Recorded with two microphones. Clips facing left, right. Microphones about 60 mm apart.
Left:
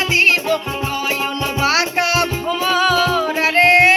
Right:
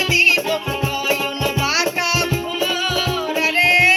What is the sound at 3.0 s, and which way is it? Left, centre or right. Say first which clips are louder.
Music: left 4 dB; left.